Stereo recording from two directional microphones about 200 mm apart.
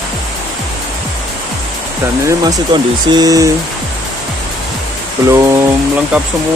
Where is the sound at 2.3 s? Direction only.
20° right (ahead or behind).